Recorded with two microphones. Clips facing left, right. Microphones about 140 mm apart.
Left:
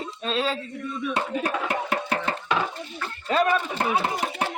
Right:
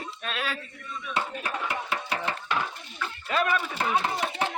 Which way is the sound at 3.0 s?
35° left (ahead or behind).